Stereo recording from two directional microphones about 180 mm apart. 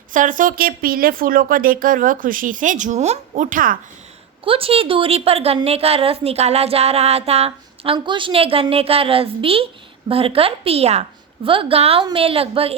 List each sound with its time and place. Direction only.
0.1 s speech: 45° right (ahead or behind)
4.4 s a woman's voice: 30° right (ahead or behind)